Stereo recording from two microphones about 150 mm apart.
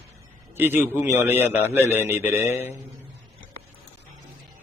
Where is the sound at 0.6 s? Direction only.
15° right (ahead or behind).